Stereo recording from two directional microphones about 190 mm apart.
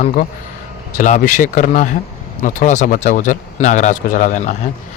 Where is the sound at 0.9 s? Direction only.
40° left (ahead or behind).